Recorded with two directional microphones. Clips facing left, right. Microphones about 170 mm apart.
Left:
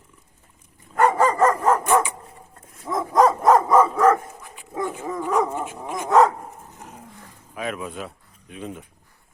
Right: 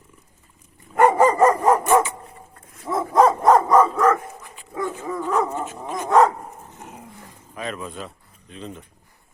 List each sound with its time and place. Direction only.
0.9 s dog: 15° right (ahead or behind); by 6.1 s 15° left (ahead or behind)
6.1 s dog: centre (ahead or behind)
7.5 s speech: 5° left (ahead or behind)